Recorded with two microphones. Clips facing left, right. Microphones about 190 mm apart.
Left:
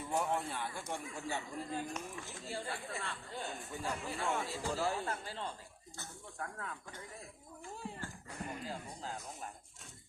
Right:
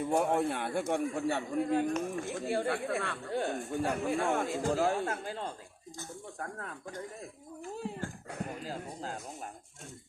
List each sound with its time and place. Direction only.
0.0 s a man's voice: 55° right (ahead or behind)
8.6 s speech: 45° right (ahead or behind)